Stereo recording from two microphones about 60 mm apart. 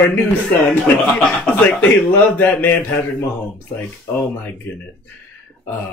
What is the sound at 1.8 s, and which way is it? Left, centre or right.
Speech, left.